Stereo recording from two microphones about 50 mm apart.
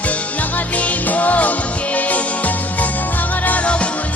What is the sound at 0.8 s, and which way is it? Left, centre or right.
Music, left.